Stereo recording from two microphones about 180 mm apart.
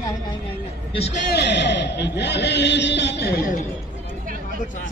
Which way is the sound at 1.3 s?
75° left (ahead or behind).